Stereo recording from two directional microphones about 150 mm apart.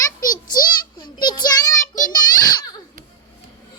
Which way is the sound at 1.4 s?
25° left (ahead or behind).